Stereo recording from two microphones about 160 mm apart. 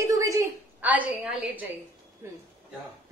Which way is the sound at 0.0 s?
20° right (ahead or behind).